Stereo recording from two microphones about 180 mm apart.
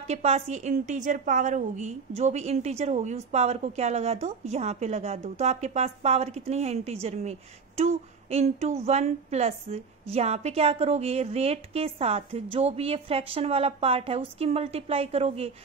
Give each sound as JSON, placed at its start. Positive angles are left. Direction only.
{"t": 0.0, "sound": "a woman's voice", "side_deg": -35}